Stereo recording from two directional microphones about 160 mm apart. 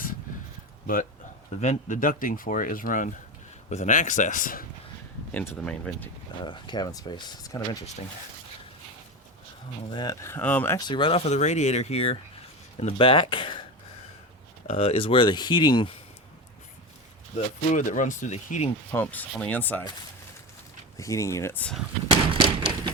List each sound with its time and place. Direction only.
1.6 s speech: 55° left (ahead or behind)
5.3 s speech: 10° left (ahead or behind)
6.4 s speech: 30° left (ahead or behind)
9.9 s speech: 25° left (ahead or behind)
10.8 s speech: 30° left (ahead or behind)
14.7 s speech: 35° left (ahead or behind)
17.3 s speech: 50° left (ahead or behind)
18.9 s speech: 10° left (ahead or behind)
21.0 s speech: 20° left (ahead or behind)
22.1 s a sound: 35° right (ahead or behind)